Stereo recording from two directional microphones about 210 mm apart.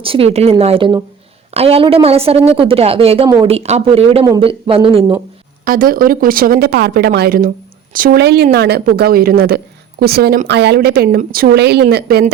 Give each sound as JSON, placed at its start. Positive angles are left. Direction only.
{"t": 0.0, "sound": "speech", "side_deg": -25}
{"t": 5.6, "sound": "speech", "side_deg": -40}